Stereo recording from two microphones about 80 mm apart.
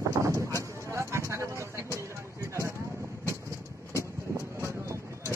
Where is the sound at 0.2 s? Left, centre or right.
Right.